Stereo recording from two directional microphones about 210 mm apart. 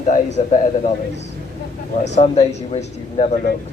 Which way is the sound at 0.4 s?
35° left (ahead or behind).